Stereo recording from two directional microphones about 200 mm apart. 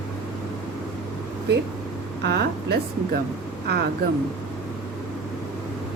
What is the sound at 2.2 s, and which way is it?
Speech, 55° right (ahead or behind).